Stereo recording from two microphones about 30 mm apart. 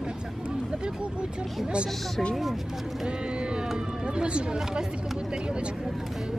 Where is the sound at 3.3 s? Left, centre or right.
Right.